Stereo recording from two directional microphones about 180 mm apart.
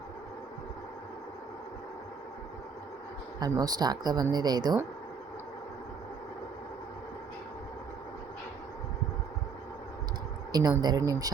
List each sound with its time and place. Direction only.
3.4 s speech: 20° right (ahead or behind)
10.5 s speech: 20° right (ahead or behind)